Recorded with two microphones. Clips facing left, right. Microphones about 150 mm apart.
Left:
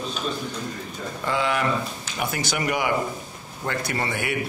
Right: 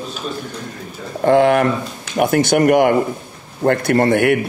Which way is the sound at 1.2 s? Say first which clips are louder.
Right 12 dB; 55° right (ahead or behind).